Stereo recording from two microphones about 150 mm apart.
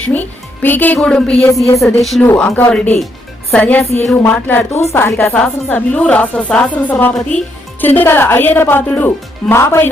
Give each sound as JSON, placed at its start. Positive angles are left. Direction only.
{"t": 0.0, "sound": "speech", "side_deg": 10}
{"t": 2.2, "sound": "speech", "side_deg": 15}